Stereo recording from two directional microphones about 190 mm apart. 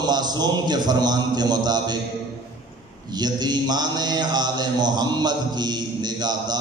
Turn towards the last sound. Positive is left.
turn(degrees=-20)  # may be behind; listen again after turning